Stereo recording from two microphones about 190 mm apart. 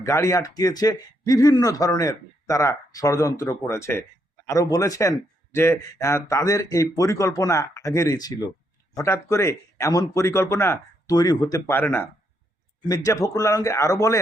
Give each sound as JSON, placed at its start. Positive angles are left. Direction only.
{"t": 0.0, "sound": "speech", "side_deg": 15}